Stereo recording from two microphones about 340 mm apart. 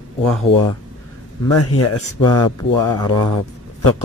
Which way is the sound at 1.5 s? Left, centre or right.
Left.